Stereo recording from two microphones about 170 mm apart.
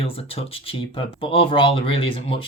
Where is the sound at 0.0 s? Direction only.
35° left (ahead or behind).